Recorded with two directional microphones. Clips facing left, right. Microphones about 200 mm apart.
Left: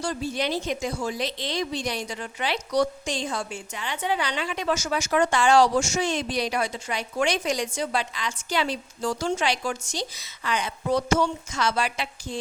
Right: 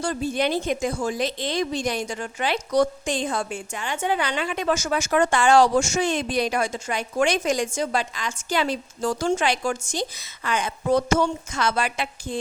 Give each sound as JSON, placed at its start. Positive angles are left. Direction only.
{"t": 0.0, "sound": "speech", "side_deg": -50}